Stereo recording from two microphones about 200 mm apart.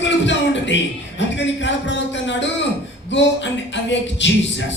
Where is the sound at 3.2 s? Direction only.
65° left (ahead or behind).